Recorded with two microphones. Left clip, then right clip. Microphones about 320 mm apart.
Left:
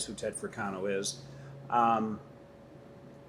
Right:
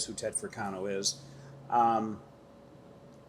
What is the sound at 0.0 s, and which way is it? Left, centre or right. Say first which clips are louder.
Speech: right 1 dB; right.